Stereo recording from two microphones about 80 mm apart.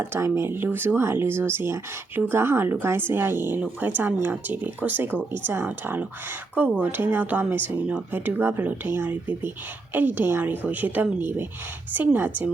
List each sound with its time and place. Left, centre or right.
0.0 s speech: right